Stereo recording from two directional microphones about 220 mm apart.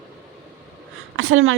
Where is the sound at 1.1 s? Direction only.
70° right (ahead or behind).